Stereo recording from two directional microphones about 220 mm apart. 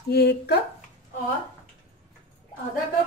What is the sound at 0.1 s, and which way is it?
Speech, 45° left (ahead or behind).